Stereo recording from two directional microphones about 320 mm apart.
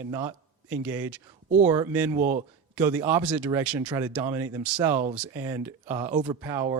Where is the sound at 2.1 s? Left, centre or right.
Right.